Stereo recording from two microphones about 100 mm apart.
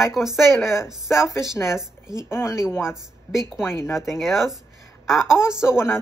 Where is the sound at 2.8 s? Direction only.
5° right (ahead or behind).